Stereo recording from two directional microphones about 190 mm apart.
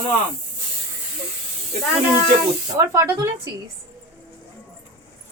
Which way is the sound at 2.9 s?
15° right (ahead or behind).